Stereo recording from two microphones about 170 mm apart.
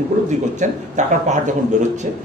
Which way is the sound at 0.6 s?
45° right (ahead or behind).